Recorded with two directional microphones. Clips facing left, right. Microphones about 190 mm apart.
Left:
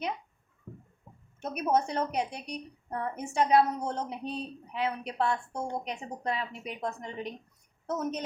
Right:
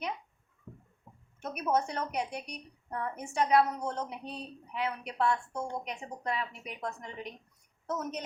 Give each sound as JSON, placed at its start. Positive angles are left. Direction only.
{"t": 1.4, "sound": "a woman's voice", "side_deg": 25}